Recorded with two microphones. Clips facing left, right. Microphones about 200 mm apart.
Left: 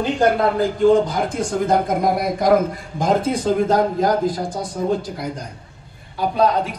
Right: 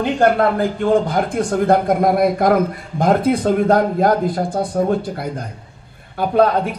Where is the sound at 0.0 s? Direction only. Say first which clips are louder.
Right 2 dB; 60° right (ahead or behind).